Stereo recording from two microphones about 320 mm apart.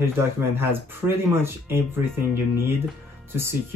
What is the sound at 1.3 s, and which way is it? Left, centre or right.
Speech, centre.